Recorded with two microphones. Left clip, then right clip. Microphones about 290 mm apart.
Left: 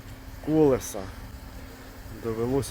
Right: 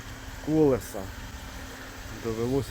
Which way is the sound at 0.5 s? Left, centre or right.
Centre.